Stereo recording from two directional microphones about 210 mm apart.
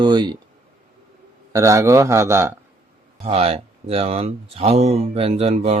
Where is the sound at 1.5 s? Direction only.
15° right (ahead or behind).